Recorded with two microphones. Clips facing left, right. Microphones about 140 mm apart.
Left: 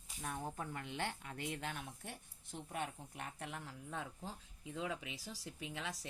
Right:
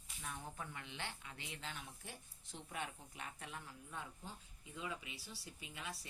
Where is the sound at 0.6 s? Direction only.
45° left (ahead or behind); by 4.1 s 75° left (ahead or behind).